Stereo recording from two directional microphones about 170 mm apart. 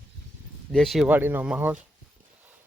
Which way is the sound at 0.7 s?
Centre (ahead or behind).